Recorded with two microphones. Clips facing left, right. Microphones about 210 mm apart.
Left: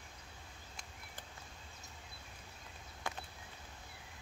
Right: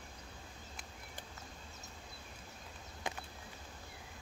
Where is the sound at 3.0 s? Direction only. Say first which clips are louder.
Right 1 dB; 20° right (ahead or behind).